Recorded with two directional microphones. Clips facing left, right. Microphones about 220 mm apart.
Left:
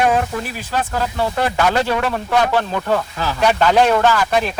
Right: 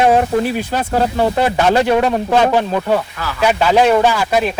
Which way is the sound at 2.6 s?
15° right (ahead or behind).